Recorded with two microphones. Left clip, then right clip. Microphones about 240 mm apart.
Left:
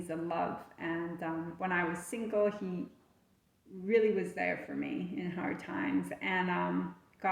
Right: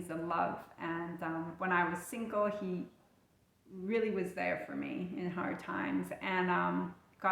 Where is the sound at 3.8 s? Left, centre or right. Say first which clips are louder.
Left 5 dB; centre.